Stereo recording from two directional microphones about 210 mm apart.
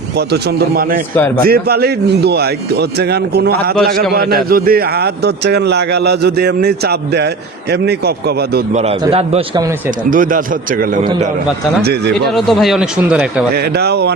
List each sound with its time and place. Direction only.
0.2 s a man's voice: 50° right (ahead or behind)
8.7 s a man's voice: 30° right (ahead or behind)
10.1 s a man's voice: 40° right (ahead or behind)
12.3 s speech: centre (ahead or behind)
13.5 s a man's voice: 50° right (ahead or behind)